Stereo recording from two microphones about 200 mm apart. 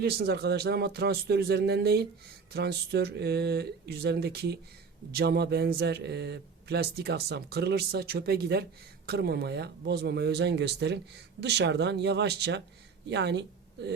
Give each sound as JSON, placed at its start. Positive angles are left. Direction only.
{"t": 0.0, "sound": "speech", "side_deg": -50}